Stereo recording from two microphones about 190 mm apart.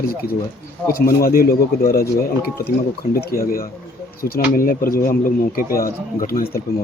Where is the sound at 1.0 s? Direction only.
50° left (ahead or behind).